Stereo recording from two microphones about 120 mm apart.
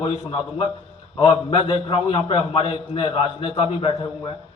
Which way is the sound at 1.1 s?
45° left (ahead or behind).